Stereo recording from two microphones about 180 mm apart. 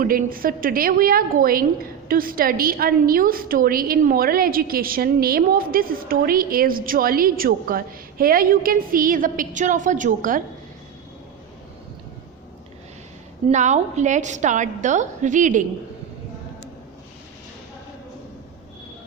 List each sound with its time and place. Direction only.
0.0 s a woman's voice: 50° right (ahead or behind)
13.5 s a woman's voice: 40° right (ahead or behind)